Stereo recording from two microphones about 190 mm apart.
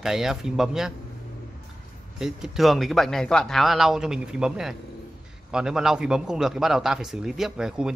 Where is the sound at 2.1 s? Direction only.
Centre (ahead or behind).